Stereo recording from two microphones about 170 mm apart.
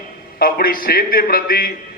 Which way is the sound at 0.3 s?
60° left (ahead or behind).